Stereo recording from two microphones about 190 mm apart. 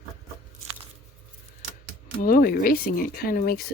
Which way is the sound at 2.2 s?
50° left (ahead or behind).